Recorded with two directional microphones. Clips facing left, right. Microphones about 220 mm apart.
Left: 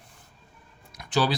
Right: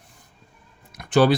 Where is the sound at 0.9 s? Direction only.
55° right (ahead or behind).